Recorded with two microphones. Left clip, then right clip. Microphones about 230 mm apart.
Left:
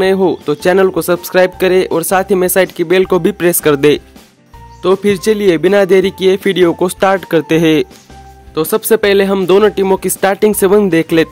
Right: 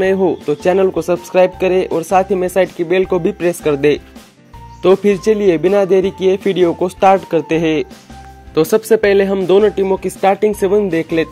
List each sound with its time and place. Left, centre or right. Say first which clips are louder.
0.0 s speech: left 2 dB; centre
4.8 s speech: even; centre
5.1 s speech: left 1 dB; centre
8.5 s speech: right 1 dB; centre
8.8 s speech: left 1 dB; centre